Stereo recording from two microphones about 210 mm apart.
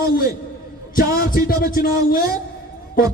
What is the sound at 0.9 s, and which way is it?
Music, 40° left (ahead or behind).